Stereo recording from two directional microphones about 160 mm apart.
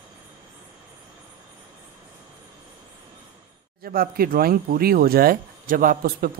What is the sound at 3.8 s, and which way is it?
Speech, 65° right (ahead or behind).